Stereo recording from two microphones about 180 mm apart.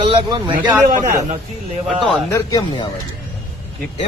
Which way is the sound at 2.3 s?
20° left (ahead or behind).